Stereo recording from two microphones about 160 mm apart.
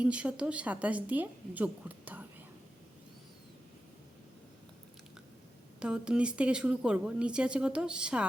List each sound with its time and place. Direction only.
0.0 s speech: 5° right (ahead or behind)
5.8 s speech: 5° right (ahead or behind)